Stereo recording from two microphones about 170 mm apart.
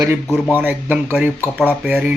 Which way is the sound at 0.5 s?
10° right (ahead or behind).